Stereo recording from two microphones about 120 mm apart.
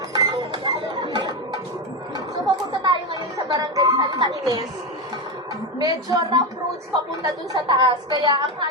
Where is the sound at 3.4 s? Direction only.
30° right (ahead or behind).